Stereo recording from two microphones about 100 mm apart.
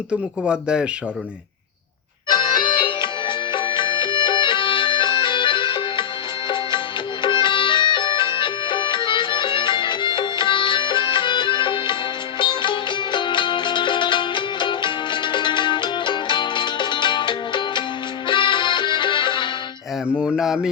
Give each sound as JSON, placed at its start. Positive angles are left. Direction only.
{"t": 0.1, "sound": "speech", "side_deg": -10}
{"t": 2.3, "sound": "music", "side_deg": 50}
{"t": 20.2, "sound": "a sound", "side_deg": -5}